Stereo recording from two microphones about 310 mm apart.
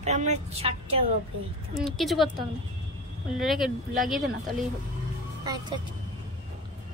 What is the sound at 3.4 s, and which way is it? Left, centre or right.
Speech, centre.